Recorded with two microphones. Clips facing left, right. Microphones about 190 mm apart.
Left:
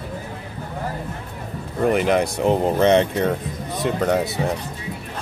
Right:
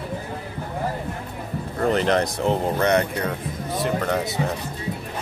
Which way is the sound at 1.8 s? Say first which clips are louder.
Left 2 dB; 10° left (ahead or behind).